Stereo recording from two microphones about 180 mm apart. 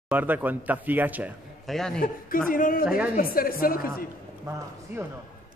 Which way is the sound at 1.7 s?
Centre (ahead or behind).